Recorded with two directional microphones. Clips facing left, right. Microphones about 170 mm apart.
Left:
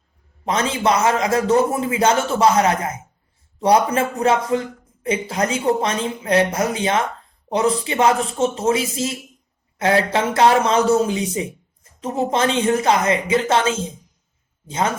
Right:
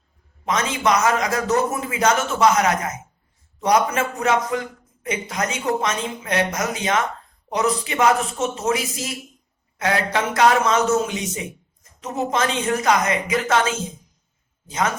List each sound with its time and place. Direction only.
0.4 s a man's voice: 30° left (ahead or behind)